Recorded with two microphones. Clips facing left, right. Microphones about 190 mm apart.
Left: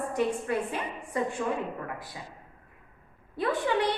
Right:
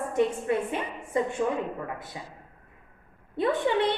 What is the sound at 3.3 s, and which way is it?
Speech, 25° right (ahead or behind).